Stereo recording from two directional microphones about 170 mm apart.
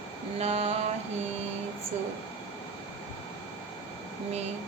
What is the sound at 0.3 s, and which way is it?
Speech, 40° right (ahead or behind).